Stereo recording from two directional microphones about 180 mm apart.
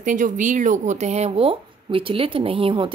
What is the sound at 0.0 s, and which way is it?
A woman's voice, 45° right (ahead or behind).